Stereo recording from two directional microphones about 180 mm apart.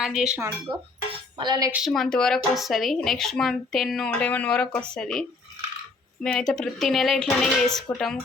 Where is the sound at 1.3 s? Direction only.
25° right (ahead or behind).